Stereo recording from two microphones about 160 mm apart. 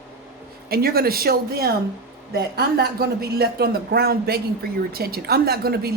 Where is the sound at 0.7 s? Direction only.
70° right (ahead or behind).